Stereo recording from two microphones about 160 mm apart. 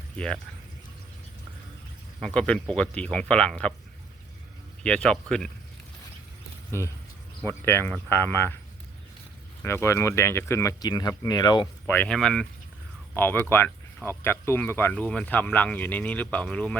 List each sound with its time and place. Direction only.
2.2 s speech: 5° left (ahead or behind)
4.8 s speech: 5° left (ahead or behind)
6.7 s speech: 15° left (ahead or behind)
9.6 s speech: 15° left (ahead or behind)
11.9 s speech: 10° left (ahead or behind)